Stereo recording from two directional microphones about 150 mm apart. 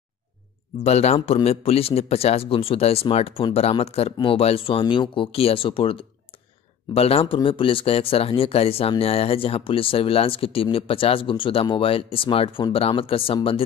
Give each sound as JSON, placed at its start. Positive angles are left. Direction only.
{"t": 0.8, "sound": "speech", "side_deg": 45}